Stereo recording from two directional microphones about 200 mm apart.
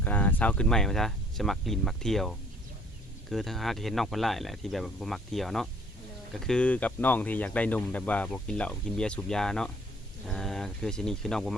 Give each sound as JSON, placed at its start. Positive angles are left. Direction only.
{"t": 0.0, "sound": "speech", "side_deg": 10}